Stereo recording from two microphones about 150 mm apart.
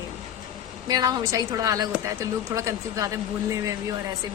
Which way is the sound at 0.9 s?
25° right (ahead or behind).